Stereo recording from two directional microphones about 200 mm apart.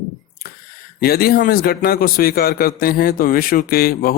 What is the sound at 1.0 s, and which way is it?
Speech, 50° left (ahead or behind).